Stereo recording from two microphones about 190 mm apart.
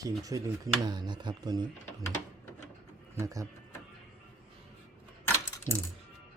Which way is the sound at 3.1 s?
15° right (ahead or behind).